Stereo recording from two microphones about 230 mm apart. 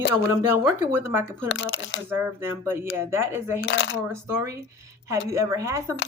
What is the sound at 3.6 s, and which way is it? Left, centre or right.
Speech, left.